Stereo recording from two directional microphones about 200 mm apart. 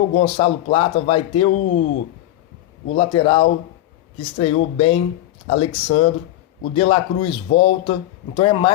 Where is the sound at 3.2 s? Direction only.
25° left (ahead or behind).